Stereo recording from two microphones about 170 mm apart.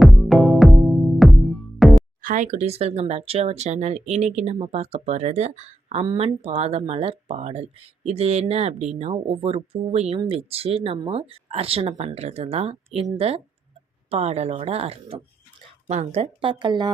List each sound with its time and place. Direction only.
0.0 s music: centre (ahead or behind)
2.2 s speech: 50° right (ahead or behind); by 16.9 s 25° right (ahead or behind)